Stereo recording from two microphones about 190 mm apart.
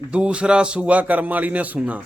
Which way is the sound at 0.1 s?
5° right (ahead or behind).